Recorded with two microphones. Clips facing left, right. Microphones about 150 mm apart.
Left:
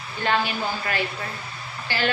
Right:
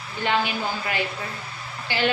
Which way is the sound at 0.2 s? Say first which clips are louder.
Even; 15° right (ahead or behind).